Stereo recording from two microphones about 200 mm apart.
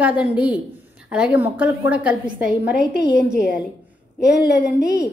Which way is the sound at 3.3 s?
5° right (ahead or behind).